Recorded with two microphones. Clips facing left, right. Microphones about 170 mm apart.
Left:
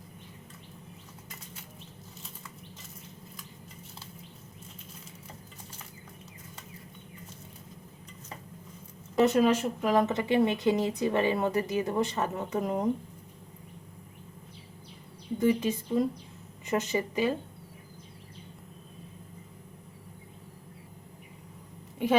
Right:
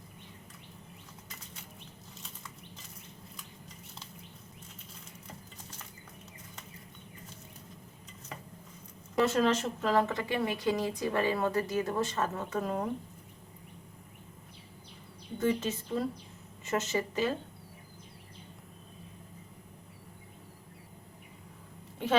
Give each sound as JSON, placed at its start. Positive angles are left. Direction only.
{"t": 9.1, "sound": "speech", "side_deg": 15}
{"t": 15.4, "sound": "speech", "side_deg": 15}
{"t": 22.0, "sound": "a sound", "side_deg": 10}